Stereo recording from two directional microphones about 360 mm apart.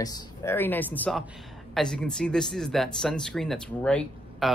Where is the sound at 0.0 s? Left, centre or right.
Centre.